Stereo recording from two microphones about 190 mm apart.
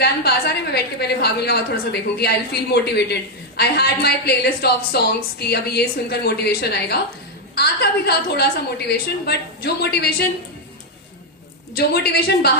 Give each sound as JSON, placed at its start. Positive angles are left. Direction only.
{"t": 0.0, "sound": "a woman's voice", "side_deg": 55}
{"t": 11.7, "sound": "a woman's voice", "side_deg": 55}